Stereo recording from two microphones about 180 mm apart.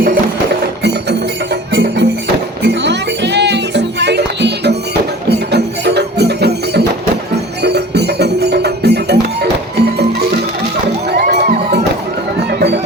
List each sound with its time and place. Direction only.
1.7 s music: 75° right (ahead or behind)
11.2 s crowd: 65° right (ahead or behind)